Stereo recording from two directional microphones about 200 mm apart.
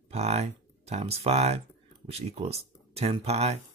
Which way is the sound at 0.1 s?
30° right (ahead or behind).